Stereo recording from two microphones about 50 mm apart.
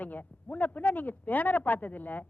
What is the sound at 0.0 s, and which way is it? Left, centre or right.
Speech, left.